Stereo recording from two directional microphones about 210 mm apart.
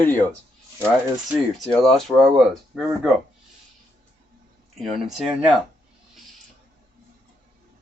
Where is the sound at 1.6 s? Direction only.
Centre (ahead or behind).